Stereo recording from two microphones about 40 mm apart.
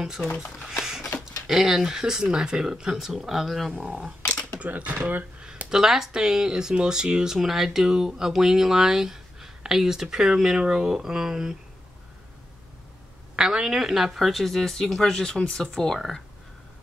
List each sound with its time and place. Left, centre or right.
0.2 s speech: left
0.7 s a sound: centre
1.9 s speech: centre
4.6 s speech: right
5.7 s speech: centre
7.3 s speech: centre
13.4 s speech: centre